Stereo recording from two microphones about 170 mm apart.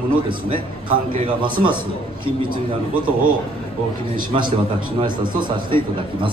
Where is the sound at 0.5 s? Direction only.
35° right (ahead or behind).